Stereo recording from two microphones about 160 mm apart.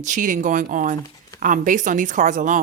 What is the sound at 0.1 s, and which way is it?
Speech, 50° right (ahead or behind).